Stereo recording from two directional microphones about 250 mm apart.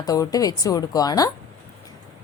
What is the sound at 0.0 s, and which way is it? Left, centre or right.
A woman's voice, centre.